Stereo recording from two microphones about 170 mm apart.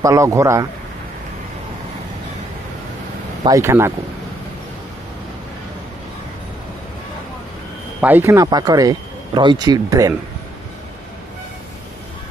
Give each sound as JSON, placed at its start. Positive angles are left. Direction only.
{"t": 0.0, "sound": "a man's voice", "side_deg": -20}
{"t": 3.4, "sound": "a man's voice", "side_deg": -15}
{"t": 8.0, "sound": "speech", "side_deg": -10}